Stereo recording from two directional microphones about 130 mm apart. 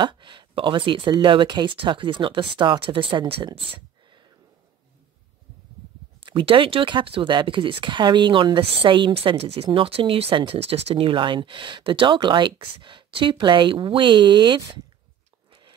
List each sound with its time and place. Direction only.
0.0 s speech: 40° right (ahead or behind)
3.4 s a sound: 35° right (ahead or behind)
6.2 s speech: 40° right (ahead or behind)